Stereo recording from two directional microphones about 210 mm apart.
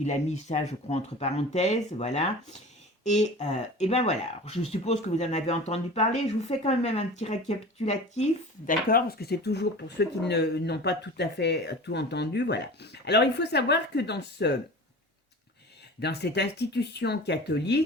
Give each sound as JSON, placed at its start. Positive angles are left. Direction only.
{"t": 0.0, "sound": "speech", "side_deg": 30}
{"t": 16.0, "sound": "speech", "side_deg": 55}